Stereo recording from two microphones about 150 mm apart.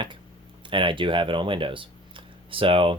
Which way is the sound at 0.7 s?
35° right (ahead or behind).